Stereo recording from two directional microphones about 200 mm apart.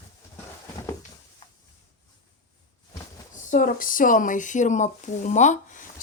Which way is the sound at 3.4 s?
40° left (ahead or behind).